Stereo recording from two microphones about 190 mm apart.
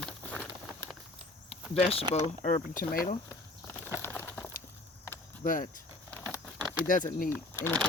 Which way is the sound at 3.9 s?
10° left (ahead or behind).